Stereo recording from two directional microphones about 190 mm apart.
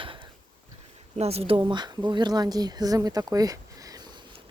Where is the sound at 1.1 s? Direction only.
35° right (ahead or behind).